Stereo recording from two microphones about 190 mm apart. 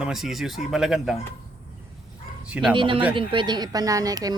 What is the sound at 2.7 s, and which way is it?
Speech, 25° right (ahead or behind).